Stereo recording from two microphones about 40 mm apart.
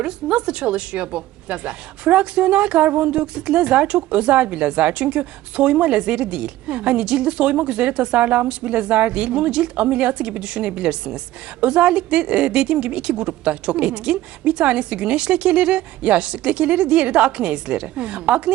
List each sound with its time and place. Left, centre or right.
0.0 s a woman's voice: right